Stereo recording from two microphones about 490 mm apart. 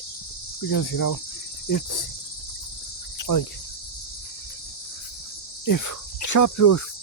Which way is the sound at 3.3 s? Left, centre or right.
Left.